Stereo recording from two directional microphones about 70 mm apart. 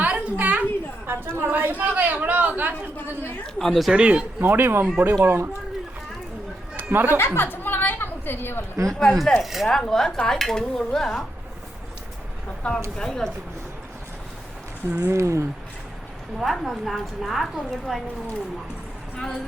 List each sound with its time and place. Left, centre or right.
0.0 s a sound: right
1.5 s speech: right
3.4 s a woman's voice: centre
3.9 s speech: centre
4.4 s speech: right
6.9 s speech: right
7.2 s a sound: left
8.9 s dishes: centre
10.6 s a woman's voice: centre
12.6 s dishes: centre
14.8 s speech: right
15.1 s speech: right
16.4 s a woman's voice: centre